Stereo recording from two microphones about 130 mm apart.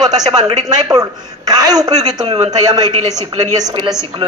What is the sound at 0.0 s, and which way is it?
A woman's voice, 30° right (ahead or behind).